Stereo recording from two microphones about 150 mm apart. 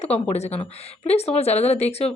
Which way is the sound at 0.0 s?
45° left (ahead or behind).